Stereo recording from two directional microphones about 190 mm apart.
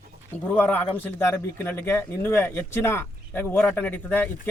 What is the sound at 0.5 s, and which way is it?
Speech, 10° left (ahead or behind).